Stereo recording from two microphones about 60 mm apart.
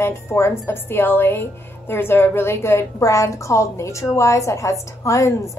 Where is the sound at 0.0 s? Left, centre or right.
Left.